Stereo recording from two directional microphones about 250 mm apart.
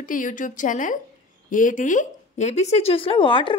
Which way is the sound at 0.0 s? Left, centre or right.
Left.